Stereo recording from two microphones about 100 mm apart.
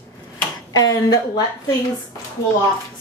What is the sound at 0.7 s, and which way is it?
Speech, 40° left (ahead or behind).